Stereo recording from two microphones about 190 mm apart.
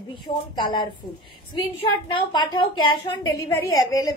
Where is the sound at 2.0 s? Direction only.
25° left (ahead or behind).